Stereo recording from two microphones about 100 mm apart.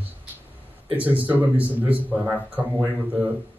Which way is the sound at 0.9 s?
15° right (ahead or behind).